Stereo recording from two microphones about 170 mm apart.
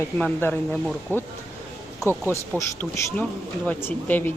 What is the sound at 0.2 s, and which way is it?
Speech, 10° left (ahead or behind).